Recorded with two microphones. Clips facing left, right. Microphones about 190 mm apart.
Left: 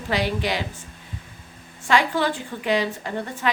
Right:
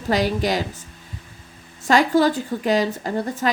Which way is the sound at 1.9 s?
40° right (ahead or behind).